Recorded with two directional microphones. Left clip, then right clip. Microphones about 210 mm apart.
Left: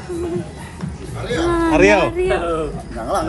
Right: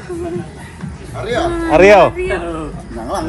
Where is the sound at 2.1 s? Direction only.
50° left (ahead or behind).